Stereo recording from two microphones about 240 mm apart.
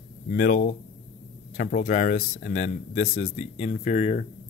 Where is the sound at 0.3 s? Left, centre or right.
Left.